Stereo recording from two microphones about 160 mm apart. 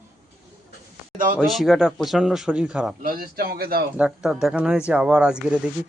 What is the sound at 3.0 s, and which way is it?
Speech, 65° right (ahead or behind).